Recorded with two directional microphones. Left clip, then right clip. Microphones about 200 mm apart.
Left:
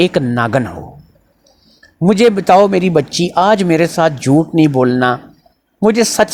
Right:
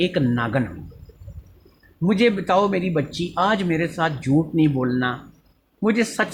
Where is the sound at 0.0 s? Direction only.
35° left (ahead or behind).